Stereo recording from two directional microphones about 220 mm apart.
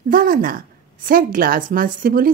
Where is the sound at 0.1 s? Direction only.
40° right (ahead or behind).